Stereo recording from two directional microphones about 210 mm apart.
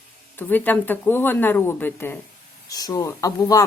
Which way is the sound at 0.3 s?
10° left (ahead or behind).